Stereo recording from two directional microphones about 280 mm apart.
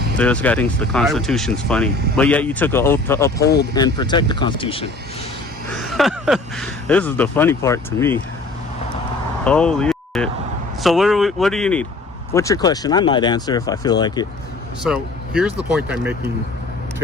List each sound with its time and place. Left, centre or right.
0.2 s speech: centre
5.9 s speech: centre
9.4 s speech: centre
14.8 s speech: centre